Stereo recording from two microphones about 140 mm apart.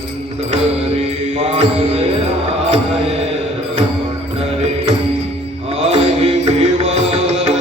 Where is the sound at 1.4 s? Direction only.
45° right (ahead or behind).